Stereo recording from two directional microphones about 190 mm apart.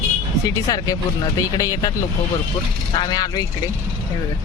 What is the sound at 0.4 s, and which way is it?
Speech, 20° left (ahead or behind).